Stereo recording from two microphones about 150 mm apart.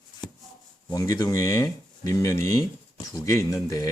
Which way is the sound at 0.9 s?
25° left (ahead or behind).